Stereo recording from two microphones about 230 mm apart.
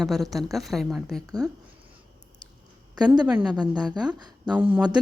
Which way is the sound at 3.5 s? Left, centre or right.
Centre.